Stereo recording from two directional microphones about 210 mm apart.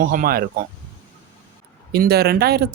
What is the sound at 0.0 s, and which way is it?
Speech, 45° right (ahead or behind).